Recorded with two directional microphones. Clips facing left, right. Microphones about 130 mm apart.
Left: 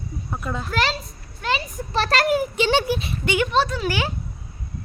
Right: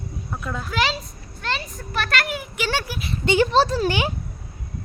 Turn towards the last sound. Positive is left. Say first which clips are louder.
# right 3 dB
turn(degrees=-35)  # may be behind; listen again after turning